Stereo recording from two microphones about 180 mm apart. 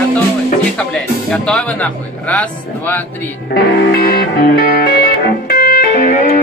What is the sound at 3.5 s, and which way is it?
Music, 60° left (ahead or behind).